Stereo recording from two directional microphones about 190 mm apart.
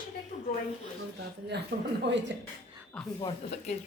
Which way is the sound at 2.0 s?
70° right (ahead or behind).